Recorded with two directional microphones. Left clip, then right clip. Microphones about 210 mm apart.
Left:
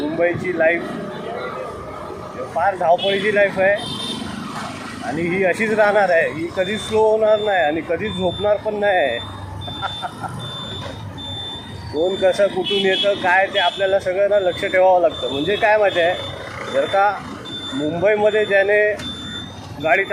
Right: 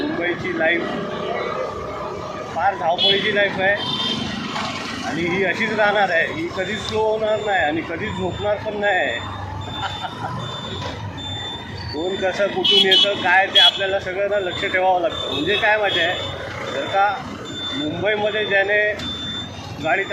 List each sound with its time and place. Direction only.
0.2 s speech: 55° left (ahead or behind)
2.6 s speech: 55° left (ahead or behind)
5.3 s speech: 55° left (ahead or behind)
12.2 s speech: 60° left (ahead or behind)